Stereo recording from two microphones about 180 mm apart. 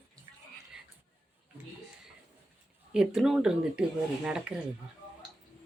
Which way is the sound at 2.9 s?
5° right (ahead or behind).